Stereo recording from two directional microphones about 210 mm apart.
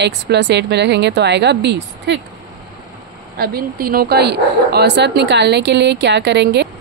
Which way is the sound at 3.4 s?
45° right (ahead or behind).